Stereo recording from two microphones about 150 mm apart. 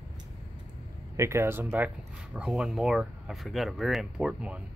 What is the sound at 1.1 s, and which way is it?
Speech, 20° right (ahead or behind).